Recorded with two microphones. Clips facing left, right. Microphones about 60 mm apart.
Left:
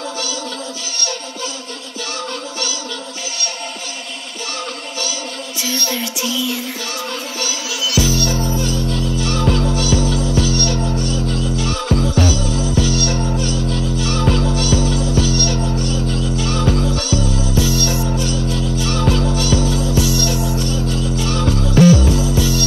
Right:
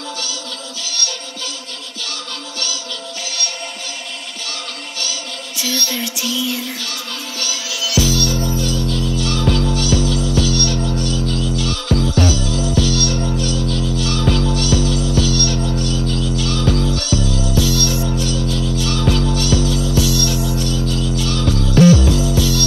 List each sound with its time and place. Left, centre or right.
5.7 s music: left
7.3 s music: left